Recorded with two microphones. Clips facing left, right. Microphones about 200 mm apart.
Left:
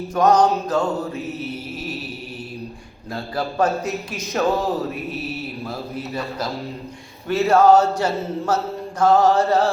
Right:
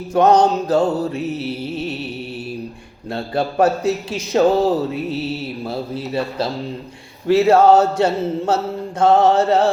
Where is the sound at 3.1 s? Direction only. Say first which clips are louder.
Right 5 dB; 30° right (ahead or behind).